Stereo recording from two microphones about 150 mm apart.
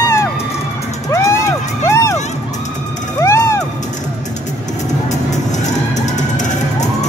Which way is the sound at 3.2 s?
20° left (ahead or behind).